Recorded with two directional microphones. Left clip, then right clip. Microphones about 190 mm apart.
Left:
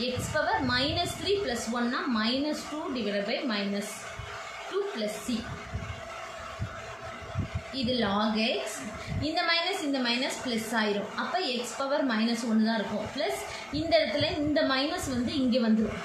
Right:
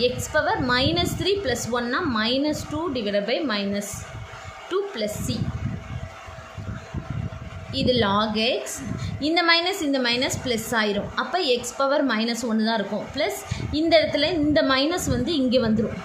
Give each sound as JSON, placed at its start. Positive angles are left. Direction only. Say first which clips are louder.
{"t": 0.0, "sound": "a woman's voice", "louder": "right 7 dB", "side_deg": -50}
{"t": 4.7, "sound": "a sound", "louder": "right 6 dB", "side_deg": -50}
{"t": 7.7, "sound": "a woman's voice", "louder": "right 8 dB", "side_deg": -50}